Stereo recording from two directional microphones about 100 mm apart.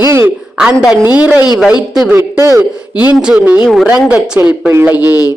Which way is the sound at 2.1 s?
30° right (ahead or behind).